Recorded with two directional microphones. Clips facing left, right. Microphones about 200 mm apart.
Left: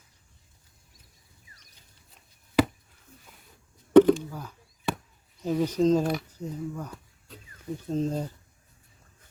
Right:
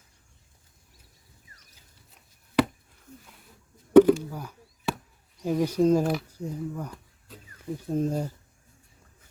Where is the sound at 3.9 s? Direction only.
10° right (ahead or behind).